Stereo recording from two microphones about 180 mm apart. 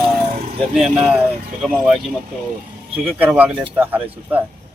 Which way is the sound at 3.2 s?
10° right (ahead or behind).